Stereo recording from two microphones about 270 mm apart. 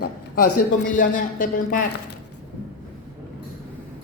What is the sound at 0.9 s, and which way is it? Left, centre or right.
Speech, left.